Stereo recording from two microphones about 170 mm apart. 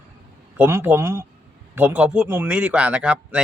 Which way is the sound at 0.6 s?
15° right (ahead or behind).